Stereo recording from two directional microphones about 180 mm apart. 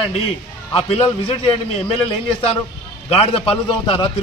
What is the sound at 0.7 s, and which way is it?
A man's voice, 30° left (ahead or behind).